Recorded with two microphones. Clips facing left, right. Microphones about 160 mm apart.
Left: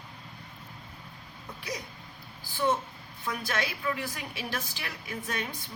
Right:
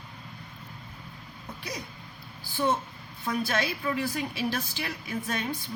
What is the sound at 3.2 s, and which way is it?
A woman's voice, 30° right (ahead or behind).